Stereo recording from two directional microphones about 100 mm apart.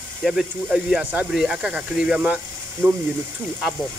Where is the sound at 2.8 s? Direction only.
20° right (ahead or behind).